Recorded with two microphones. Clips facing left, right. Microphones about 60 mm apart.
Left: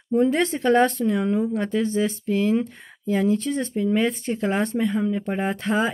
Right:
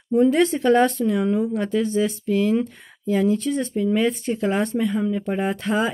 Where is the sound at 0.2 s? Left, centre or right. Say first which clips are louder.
Right 4 dB; left.